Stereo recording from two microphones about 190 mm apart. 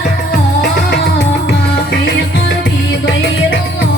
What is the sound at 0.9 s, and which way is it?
Music, 65° left (ahead or behind).